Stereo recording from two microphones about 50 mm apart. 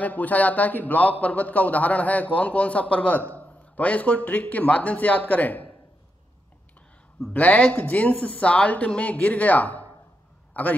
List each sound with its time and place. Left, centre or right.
0.0 s a man's voice: left
7.3 s speech: left